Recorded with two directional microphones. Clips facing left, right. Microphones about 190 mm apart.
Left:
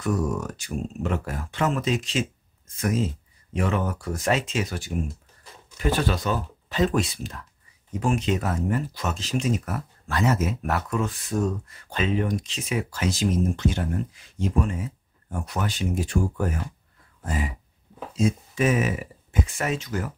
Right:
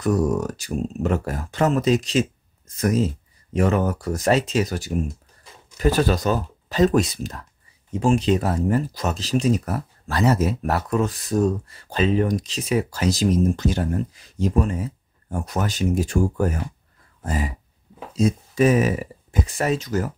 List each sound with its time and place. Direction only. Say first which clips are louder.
0.0 s speech: right 5 dB; 35° right (ahead or behind)
7.9 s speech: right 5 dB; 25° right (ahead or behind)
17.2 s a sound: right 3 dB; 40° right (ahead or behind)
18.1 s speech: right 3 dB; 40° right (ahead or behind)